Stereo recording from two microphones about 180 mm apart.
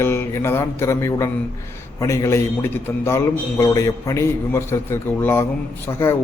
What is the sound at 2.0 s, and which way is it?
A man's voice, 20° left (ahead or behind).